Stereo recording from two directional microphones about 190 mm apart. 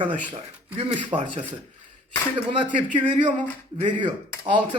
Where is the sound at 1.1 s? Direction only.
25° right (ahead or behind).